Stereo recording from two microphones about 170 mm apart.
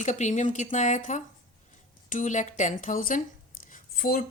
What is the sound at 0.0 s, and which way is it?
Speech, 45° left (ahead or behind).